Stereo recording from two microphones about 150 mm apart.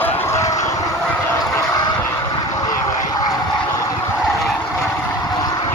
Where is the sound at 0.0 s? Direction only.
15° left (ahead or behind).